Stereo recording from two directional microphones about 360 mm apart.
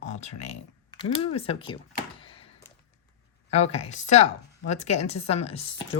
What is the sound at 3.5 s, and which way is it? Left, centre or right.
Speech, centre.